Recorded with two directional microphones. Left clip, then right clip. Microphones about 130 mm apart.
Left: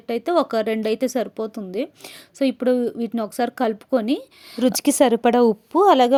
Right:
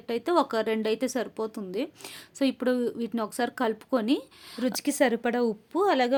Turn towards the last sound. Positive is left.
turn(degrees=45)  # may be behind; listen again after turning